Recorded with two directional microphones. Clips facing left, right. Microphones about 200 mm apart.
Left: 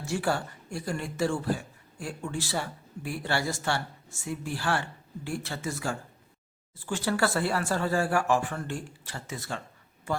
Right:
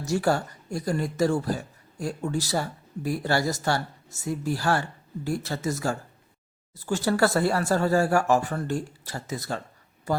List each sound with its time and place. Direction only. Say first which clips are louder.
0.0 s speech: right 5 dB; 40° right (ahead or behind)